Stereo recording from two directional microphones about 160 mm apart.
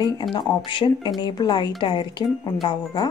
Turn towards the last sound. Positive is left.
turn(degrees=30)  # may be behind; listen again after turning